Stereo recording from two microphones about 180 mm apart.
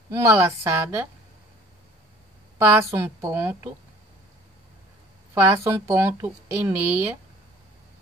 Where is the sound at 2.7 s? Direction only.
15° right (ahead or behind).